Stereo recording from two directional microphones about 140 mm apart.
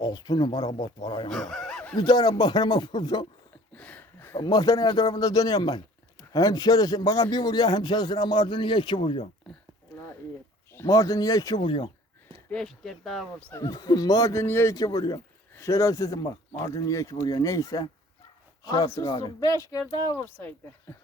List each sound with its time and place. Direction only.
0.0 s speech: 30° left (ahead or behind)
1.3 s snicker: centre (ahead or behind)
2.0 s speech: 30° left (ahead or behind)
3.8 s a sound: 10° left (ahead or behind)
4.4 s speech: 25° left (ahead or behind)
10.8 s speech: 25° left (ahead or behind)
11.6 s speech: 35° left (ahead or behind)
12.5 s speech: 5° left (ahead or behind)
13.5 s speech: 20° left (ahead or behind)